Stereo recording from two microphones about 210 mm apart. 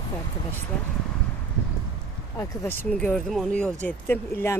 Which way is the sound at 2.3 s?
15° left (ahead or behind).